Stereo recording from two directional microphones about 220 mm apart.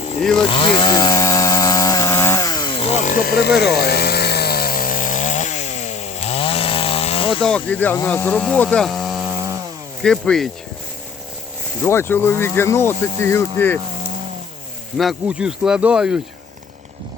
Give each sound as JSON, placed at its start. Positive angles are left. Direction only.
{"t": 0.3, "sound": "chainsaw", "side_deg": 20}
{"t": 7.4, "sound": "speech", "side_deg": 5}
{"t": 10.0, "sound": "speech", "side_deg": 5}
{"t": 11.8, "sound": "speech", "side_deg": 10}
{"t": 14.9, "sound": "speech", "side_deg": 0}